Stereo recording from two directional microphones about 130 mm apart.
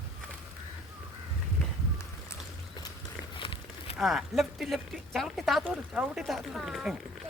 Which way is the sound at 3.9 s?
Centre (ahead or behind).